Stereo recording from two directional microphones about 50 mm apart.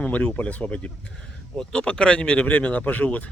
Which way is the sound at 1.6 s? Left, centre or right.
Centre.